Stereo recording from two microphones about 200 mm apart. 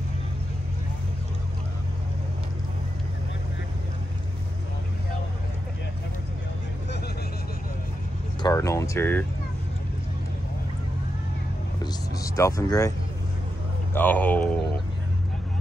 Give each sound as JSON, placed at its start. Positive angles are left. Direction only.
{"t": 8.4, "sound": "speech", "side_deg": 15}
{"t": 11.8, "sound": "vehicle", "side_deg": 15}
{"t": 13.9, "sound": "speech", "side_deg": 10}